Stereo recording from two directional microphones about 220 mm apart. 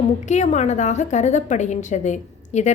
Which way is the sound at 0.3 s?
30° left (ahead or behind).